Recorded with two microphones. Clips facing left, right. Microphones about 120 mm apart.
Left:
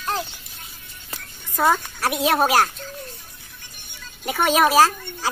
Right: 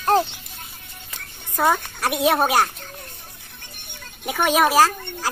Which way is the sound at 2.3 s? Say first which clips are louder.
Left 1 dB; centre (ahead or behind).